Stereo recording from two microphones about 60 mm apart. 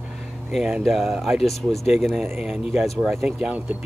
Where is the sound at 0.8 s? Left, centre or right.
Centre.